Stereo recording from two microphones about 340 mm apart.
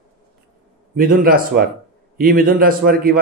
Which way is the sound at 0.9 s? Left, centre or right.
Right.